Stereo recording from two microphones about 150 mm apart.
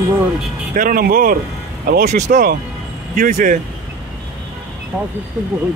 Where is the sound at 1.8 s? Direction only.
90° right.